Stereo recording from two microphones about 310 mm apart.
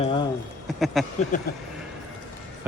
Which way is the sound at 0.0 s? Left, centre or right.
Centre.